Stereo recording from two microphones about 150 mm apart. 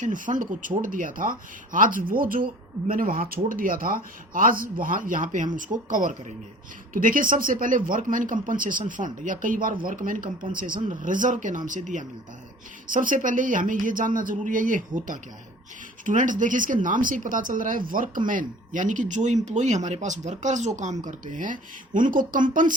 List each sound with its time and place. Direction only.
0.0 s speech: 60° right (ahead or behind)